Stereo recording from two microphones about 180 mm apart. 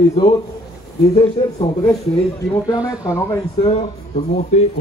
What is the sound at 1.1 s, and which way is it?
Speech, 35° left (ahead or behind).